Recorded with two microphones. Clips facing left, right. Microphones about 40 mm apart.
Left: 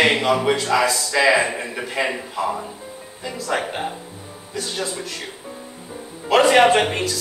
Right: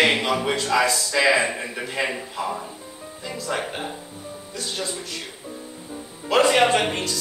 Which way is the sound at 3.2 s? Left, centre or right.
Centre.